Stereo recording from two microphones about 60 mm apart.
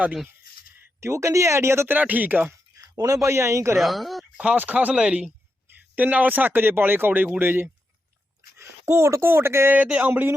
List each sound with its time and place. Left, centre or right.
1.0 s speech: right
1.9 s speech: right
2.7 s a sound: right
3.2 s speech: right
3.8 s speech: centre
4.5 s speech: right
8.5 s speech: right
9.7 s speech: right